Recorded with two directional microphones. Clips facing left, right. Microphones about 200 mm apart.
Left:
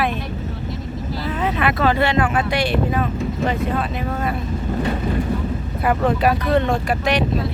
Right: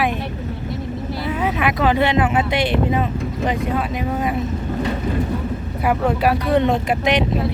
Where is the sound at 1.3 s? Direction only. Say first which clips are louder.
Even; 10° right (ahead or behind).